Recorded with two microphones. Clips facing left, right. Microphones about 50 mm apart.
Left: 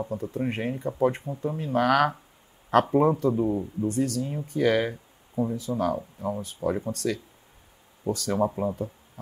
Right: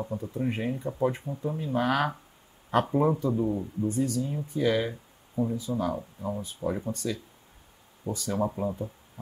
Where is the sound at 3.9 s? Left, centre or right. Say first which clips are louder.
Left 1 dB; left.